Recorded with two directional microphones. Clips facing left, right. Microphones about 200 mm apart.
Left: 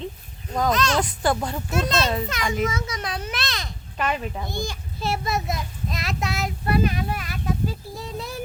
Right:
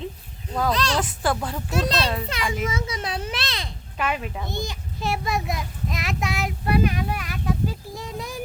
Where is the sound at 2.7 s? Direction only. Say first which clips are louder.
Right 1 dB; 30° right (ahead or behind).